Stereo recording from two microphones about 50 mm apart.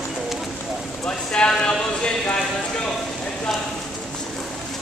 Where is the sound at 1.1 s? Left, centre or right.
Centre.